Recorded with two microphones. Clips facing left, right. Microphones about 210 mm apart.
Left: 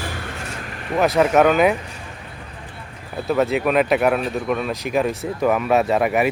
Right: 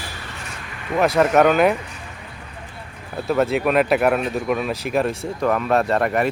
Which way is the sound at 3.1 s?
Centre (ahead or behind).